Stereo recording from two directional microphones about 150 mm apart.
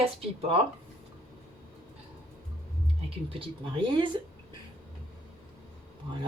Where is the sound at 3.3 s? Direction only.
35° right (ahead or behind).